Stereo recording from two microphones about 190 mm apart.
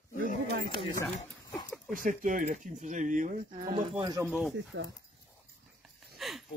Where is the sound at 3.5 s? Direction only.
25° right (ahead or behind).